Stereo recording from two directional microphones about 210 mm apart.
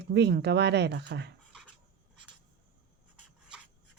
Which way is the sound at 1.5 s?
5° right (ahead or behind).